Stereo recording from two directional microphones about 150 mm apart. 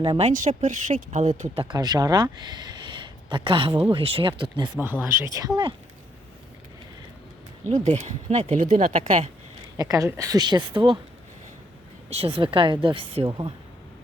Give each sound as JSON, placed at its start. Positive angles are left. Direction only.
{"t": 0.0, "sound": "speech", "side_deg": -40}
{"t": 0.3, "sound": "a woman's voice", "side_deg": -60}
{"t": 1.5, "sound": "speech", "side_deg": -30}
{"t": 5.0, "sound": "a woman's voice", "side_deg": -15}
{"t": 7.7, "sound": "speech", "side_deg": -50}
{"t": 9.7, "sound": "a woman's voice", "side_deg": -25}
{"t": 12.1, "sound": "speech", "side_deg": -40}